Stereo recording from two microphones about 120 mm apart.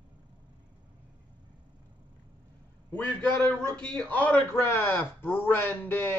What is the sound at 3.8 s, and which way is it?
A man's voice, 10° left (ahead or behind).